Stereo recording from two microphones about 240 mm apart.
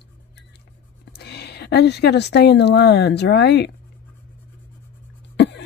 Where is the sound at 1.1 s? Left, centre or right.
Left.